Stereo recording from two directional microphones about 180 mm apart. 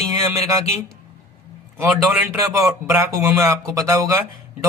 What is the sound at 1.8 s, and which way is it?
A man's voice, 10° right (ahead or behind).